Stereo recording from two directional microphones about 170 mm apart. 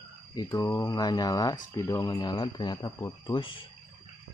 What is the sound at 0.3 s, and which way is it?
Speech, 20° left (ahead or behind).